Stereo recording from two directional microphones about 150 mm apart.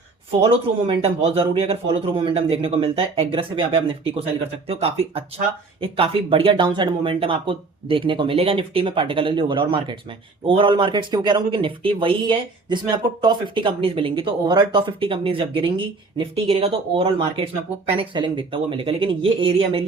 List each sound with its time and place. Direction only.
0.3 s speech: 40° right (ahead or behind)